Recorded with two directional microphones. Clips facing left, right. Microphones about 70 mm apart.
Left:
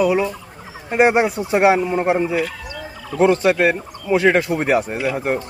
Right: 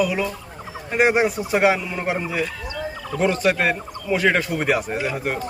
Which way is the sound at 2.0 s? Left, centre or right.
Left.